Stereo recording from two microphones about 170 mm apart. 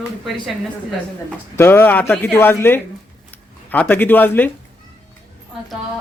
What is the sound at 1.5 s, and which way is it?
Speech, 15° left (ahead or behind).